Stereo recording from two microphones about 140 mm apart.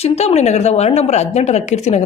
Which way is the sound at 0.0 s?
50° left (ahead or behind).